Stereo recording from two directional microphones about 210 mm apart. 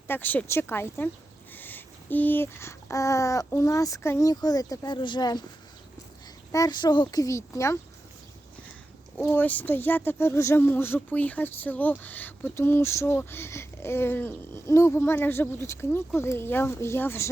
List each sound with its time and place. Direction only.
0.1 s speech: 10° left (ahead or behind)
6.5 s speech: 20° left (ahead or behind)
9.1 s speech: 5° left (ahead or behind)